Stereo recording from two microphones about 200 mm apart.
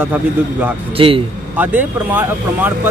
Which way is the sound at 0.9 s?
25° right (ahead or behind).